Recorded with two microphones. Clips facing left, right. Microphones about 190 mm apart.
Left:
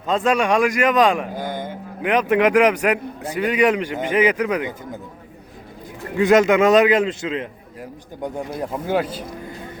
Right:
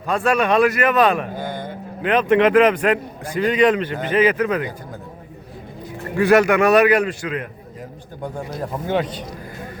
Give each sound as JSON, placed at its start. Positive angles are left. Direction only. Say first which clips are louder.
{"t": 0.1, "sound": "a man's voice", "louder": "even", "side_deg": 15}
{"t": 6.1, "sound": "a man's voice", "louder": "even", "side_deg": 20}
{"t": 8.7, "sound": "speech", "louder": "even", "side_deg": 5}